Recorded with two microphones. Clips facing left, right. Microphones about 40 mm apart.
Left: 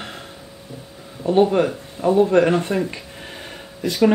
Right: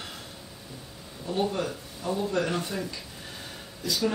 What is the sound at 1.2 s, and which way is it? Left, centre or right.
Speech, left.